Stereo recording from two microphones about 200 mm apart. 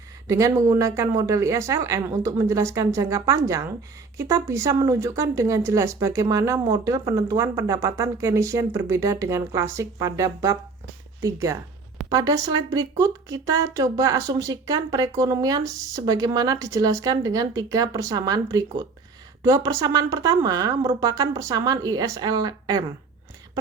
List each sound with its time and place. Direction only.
0.3 s speech: 15° right (ahead or behind)